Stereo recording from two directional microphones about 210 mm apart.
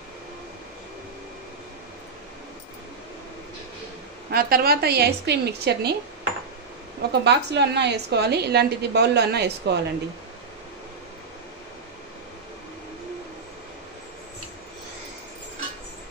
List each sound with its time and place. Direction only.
4.3 s a woman's voice: 45° right (ahead or behind)
7.1 s a woman's voice: 55° right (ahead or behind)